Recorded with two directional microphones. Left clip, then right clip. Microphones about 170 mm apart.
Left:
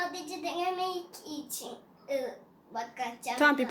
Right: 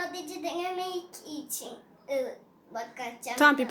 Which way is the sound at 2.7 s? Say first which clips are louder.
Left 1 dB; 25° right (ahead or behind).